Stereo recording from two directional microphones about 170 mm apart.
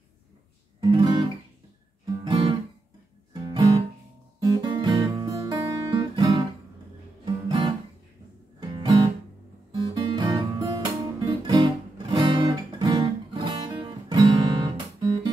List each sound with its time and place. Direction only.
2.0 s music: 25° right (ahead or behind)
4.4 s guitar: 25° right (ahead or behind)
8.5 s music: 25° right (ahead or behind)
9.7 s guitar: 25° right (ahead or behind)
12.1 s music: 25° right (ahead or behind)